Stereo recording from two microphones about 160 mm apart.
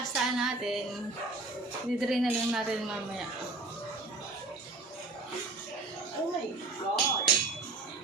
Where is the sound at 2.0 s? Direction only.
Centre (ahead or behind).